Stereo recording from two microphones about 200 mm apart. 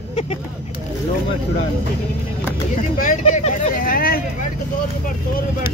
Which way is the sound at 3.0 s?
40° left (ahead or behind).